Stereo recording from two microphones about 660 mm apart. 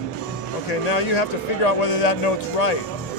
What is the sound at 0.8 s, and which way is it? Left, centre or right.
Speech, left.